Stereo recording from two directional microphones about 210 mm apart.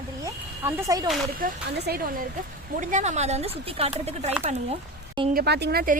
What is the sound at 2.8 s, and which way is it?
A woman's voice, 35° right (ahead or behind).